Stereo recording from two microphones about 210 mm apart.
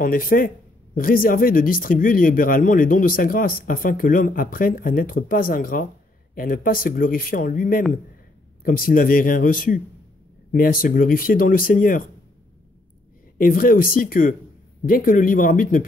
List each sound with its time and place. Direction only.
0.0 s speech: 40° left (ahead or behind)
13.4 s speech: 40° left (ahead or behind)